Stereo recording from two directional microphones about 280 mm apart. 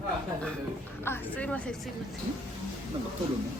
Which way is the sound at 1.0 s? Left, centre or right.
Centre.